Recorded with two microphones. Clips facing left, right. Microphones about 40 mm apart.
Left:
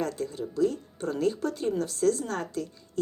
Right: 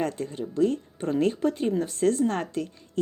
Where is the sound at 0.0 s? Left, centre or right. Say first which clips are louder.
Right 2 dB; right.